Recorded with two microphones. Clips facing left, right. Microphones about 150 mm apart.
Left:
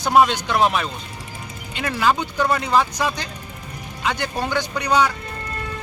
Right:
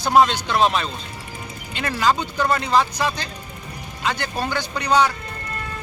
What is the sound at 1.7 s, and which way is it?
Speech, 10° left (ahead or behind).